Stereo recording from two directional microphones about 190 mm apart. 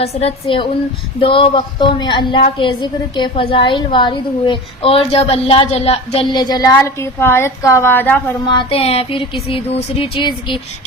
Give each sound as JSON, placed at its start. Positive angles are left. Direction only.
{"t": 0.0, "sound": "a woman's voice", "side_deg": 35}
{"t": 8.4, "sound": "a woman's voice", "side_deg": 25}